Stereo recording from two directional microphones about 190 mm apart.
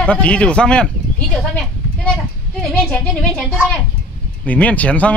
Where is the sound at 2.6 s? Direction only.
5° left (ahead or behind).